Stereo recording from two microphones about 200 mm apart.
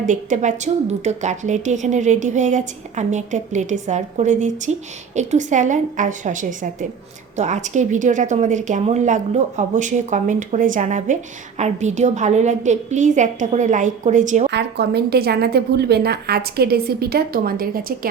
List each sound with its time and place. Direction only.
0.0 s a woman's voice: 40° right (ahead or behind)
14.5 s a woman's voice: 55° right (ahead or behind)